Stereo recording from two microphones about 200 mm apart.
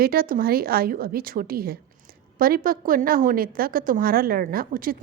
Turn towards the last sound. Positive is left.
turn(degrees=-45)  # may be behind; listen again after turning